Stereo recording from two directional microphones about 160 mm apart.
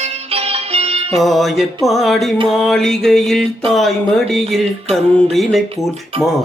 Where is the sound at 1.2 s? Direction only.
Centre (ahead or behind).